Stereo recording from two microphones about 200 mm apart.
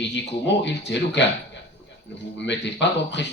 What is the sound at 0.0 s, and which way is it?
Speech, 60° left (ahead or behind).